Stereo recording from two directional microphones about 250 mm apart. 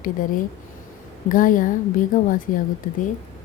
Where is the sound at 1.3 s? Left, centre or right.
Left.